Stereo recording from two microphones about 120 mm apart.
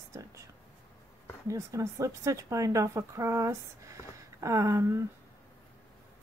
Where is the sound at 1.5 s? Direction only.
25° right (ahead or behind).